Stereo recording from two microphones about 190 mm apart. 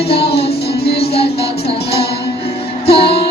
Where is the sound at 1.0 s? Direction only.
30° left (ahead or behind).